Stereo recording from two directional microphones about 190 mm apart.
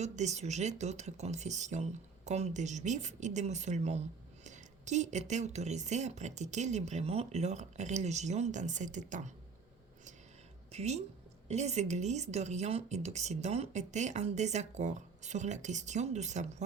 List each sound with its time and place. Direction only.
0.0 s speech: 35° right (ahead or behind)
10.7 s a woman's voice: 35° right (ahead or behind)